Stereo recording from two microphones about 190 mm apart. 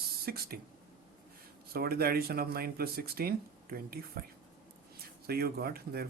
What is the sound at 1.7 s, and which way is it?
Speech, 55° right (ahead or behind).